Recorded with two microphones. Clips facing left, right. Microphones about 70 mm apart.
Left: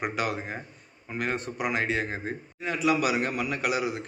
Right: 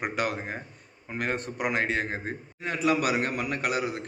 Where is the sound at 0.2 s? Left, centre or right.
Right.